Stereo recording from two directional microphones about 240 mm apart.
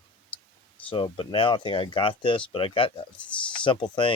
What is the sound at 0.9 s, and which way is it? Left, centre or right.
Speech, left.